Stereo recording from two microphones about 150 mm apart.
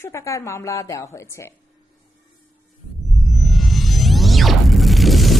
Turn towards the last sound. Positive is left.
turn(degrees=0)  # may be behind; listen again after turning